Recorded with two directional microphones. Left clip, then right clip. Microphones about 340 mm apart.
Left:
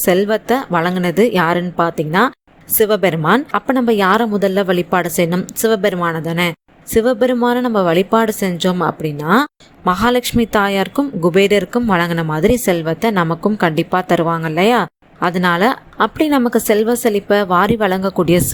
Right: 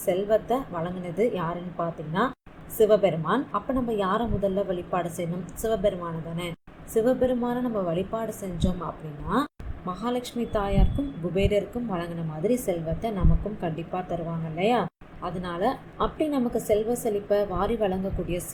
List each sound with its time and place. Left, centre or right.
0.0 s speech: left